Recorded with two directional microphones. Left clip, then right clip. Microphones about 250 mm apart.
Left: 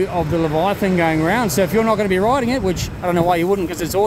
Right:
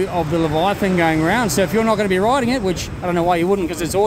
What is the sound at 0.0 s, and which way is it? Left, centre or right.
Speech, centre.